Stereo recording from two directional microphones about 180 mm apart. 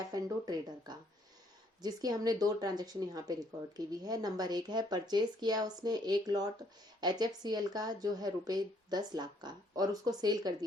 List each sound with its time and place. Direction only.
0.1 s speech: 20° right (ahead or behind)